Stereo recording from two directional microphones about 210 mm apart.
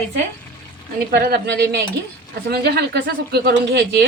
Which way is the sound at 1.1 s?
45° right (ahead or behind).